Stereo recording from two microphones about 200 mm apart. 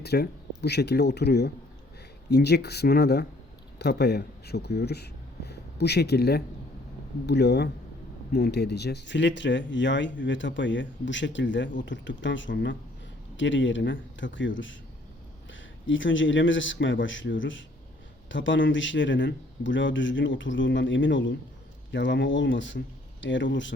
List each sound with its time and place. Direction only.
0.0 s speech: 55° left (ahead or behind)